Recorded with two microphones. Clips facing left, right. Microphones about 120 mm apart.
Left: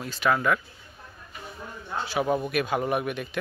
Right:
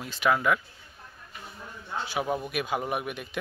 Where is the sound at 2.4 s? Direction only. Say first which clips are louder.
Left 4 dB; 10° right (ahead or behind).